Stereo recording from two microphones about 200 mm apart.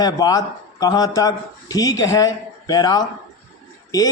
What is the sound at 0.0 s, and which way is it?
Speech, 20° left (ahead or behind).